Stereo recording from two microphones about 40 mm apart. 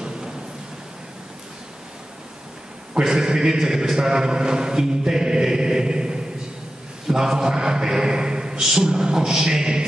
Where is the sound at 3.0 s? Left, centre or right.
Centre.